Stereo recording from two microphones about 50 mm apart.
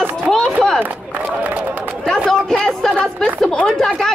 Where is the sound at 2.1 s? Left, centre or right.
Centre.